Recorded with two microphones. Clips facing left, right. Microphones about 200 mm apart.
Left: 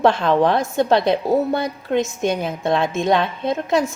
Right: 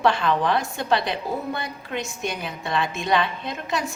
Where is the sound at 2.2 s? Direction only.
50° left (ahead or behind).